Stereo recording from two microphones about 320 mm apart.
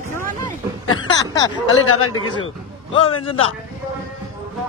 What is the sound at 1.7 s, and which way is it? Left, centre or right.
Speech, left.